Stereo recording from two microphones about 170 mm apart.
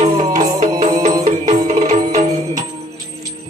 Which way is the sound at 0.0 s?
40° right (ahead or behind).